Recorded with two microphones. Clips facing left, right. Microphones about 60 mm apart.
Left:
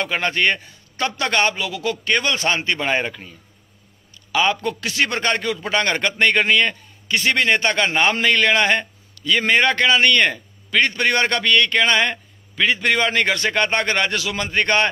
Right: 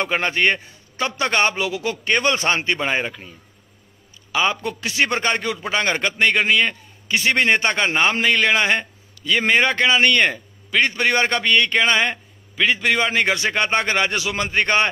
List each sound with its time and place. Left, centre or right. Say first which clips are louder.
0.1 s a man's voice: left 1 dB; centre
2.9 s a man's voice: left 1 dB; centre
7.1 s a man's voice: even; centre